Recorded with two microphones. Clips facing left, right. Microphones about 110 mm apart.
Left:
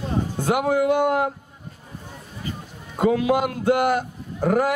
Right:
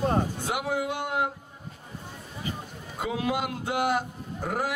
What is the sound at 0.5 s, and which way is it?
Speech, 55° left (ahead or behind).